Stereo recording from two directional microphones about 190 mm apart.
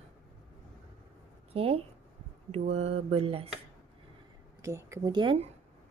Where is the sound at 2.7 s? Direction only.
35° right (ahead or behind).